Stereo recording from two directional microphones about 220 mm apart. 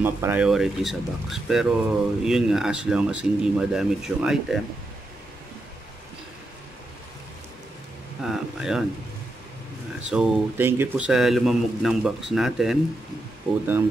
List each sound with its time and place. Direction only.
0.0 s speech: 10° right (ahead or behind)
8.2 s a sound: centre (ahead or behind)
10.0 s speech: 5° right (ahead or behind)